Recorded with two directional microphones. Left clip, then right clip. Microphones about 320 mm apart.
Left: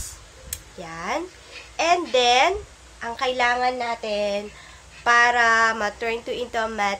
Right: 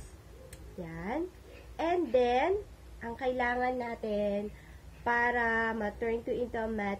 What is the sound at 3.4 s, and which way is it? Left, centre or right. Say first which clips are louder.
Speech: left 11 dB; centre.